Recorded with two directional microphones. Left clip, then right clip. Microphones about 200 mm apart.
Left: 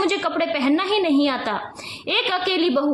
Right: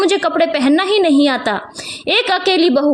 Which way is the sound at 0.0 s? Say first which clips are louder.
Right 7 dB; 35° right (ahead or behind).